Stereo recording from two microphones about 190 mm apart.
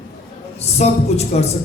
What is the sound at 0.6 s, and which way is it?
Speech, 35° left (ahead or behind).